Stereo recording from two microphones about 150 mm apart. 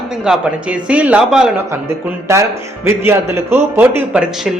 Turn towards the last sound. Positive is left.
turn(degrees=-5)  # may be behind; listen again after turning